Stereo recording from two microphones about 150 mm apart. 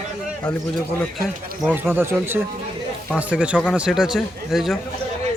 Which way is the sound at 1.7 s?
15° right (ahead or behind).